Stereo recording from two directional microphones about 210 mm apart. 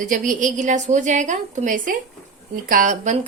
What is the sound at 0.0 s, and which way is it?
A woman's voice, 40° right (ahead or behind).